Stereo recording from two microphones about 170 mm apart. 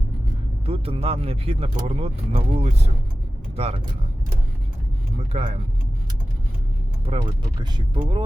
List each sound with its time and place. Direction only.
0.6 s speech: 35° right (ahead or behind)
5.1 s speech: 40° right (ahead or behind)
7.1 s speech: 30° right (ahead or behind)